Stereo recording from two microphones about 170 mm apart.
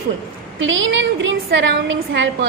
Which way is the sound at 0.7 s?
90° right.